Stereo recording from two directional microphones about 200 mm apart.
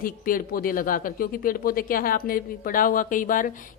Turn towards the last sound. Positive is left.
turn(degrees=40)  # may be behind; listen again after turning